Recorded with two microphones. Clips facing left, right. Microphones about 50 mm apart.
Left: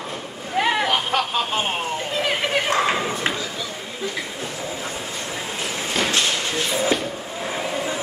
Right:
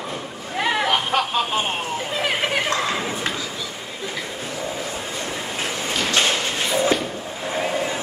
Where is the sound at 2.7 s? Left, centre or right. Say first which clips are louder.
Left 3 dB; left.